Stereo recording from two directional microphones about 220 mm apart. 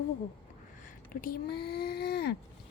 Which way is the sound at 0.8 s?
40° left (ahead or behind).